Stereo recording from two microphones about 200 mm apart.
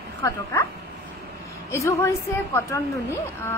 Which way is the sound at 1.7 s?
15° left (ahead or behind).